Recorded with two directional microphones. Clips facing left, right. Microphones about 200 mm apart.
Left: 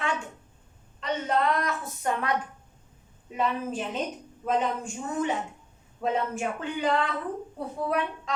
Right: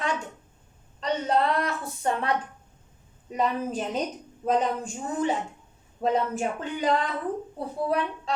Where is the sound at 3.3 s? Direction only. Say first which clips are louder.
Right 2 dB; 40° right (ahead or behind).